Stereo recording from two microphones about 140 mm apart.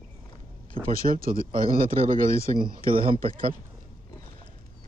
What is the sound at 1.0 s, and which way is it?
Speech, 90° right.